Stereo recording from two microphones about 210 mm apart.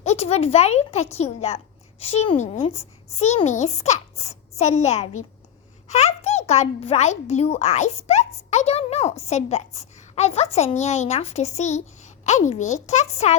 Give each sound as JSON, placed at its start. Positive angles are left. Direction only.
{"t": 0.0, "sound": "a child's voice", "side_deg": 30}